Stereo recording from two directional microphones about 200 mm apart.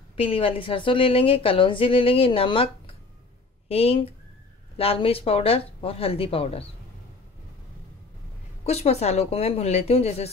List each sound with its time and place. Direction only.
0.1 s a woman's voice: 30° left (ahead or behind)
8.6 s a woman's voice: 30° left (ahead or behind)